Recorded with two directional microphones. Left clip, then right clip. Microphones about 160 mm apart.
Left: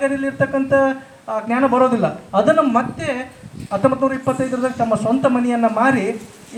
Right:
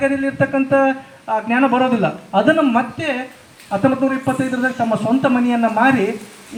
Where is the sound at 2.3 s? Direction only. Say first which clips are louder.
Even; 10° left (ahead or behind).